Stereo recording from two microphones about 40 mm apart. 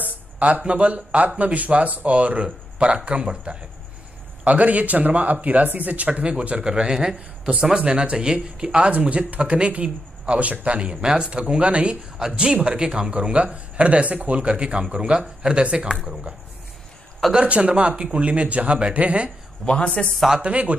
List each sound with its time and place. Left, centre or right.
0.0 s speech: right
4.5 s speech: right
6.9 s a man's voice: centre
7.7 s speech: right
19.6 s speech: left
20.3 s speech: right